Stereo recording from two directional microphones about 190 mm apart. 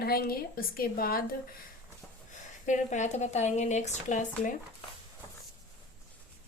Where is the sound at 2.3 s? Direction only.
40° left (ahead or behind).